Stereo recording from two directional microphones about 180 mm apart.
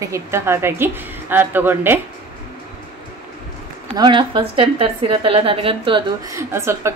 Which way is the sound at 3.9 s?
25° right (ahead or behind).